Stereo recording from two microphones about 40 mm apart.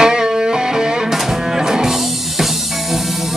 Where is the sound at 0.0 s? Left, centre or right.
Centre.